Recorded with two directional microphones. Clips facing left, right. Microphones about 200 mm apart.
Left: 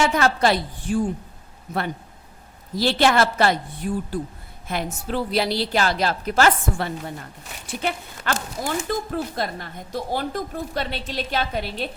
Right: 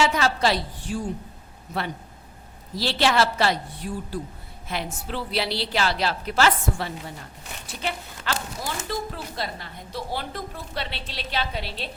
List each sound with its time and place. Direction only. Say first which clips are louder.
0.0 s a woman's voice: left 3 dB; 55° left (ahead or behind)
2.7 s a woman's voice: left 3 dB; 50° left (ahead or behind)